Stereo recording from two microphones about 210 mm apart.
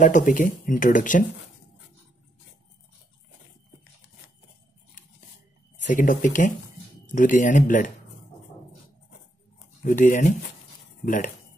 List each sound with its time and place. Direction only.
0.0 s speech: 40° left (ahead or behind)
5.9 s speech: 40° left (ahead or behind)
9.8 s speech: 40° left (ahead or behind)